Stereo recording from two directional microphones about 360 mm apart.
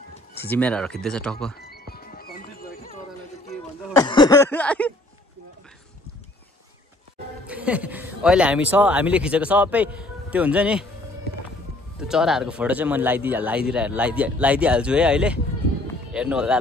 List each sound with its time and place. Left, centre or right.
0.5 s speech: centre
1.6 s music: left
3.4 s a sound: centre
7.4 s speech: centre
12.0 s speech: centre